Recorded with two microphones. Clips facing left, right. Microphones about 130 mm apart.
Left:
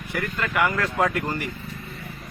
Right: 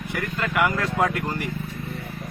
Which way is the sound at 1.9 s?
60° right (ahead or behind).